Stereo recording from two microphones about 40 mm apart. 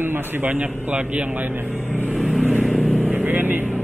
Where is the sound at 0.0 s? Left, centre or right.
Right.